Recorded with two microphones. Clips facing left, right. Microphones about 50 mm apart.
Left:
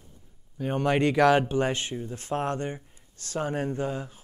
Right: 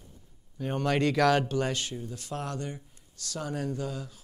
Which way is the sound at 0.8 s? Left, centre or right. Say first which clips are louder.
Left 3 dB; left.